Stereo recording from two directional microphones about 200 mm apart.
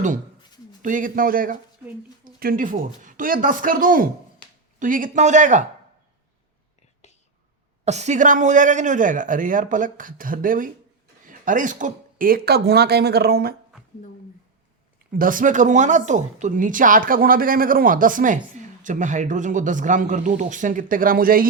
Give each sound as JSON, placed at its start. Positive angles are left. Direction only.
{"t": 0.8, "sound": "speech", "side_deg": -40}
{"t": 7.9, "sound": "speech", "side_deg": -35}
{"t": 15.2, "sound": "speech", "side_deg": -40}